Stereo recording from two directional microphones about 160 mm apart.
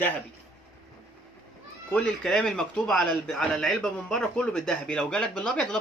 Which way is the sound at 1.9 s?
5° left (ahead or behind).